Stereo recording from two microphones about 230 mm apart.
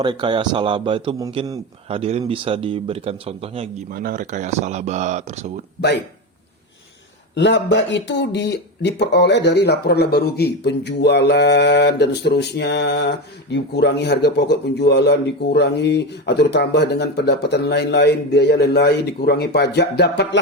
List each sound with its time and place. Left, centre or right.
0.0 s a man's voice: centre
3.9 s speech: right
7.3 s speech: left